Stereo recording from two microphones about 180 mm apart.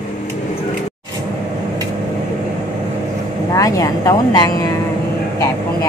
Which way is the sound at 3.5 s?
20° left (ahead or behind).